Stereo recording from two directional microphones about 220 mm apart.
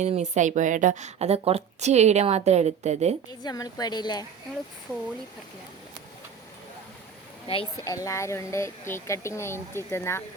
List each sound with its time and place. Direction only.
0.0 s a woman's voice: 30° right (ahead or behind)
3.4 s speech: 15° left (ahead or behind)
7.4 s speech: 25° left (ahead or behind)